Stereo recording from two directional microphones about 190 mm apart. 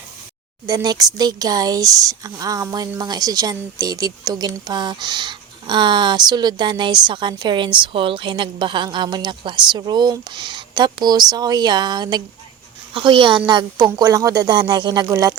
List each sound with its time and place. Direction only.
0.7 s speech: 20° right (ahead or behind)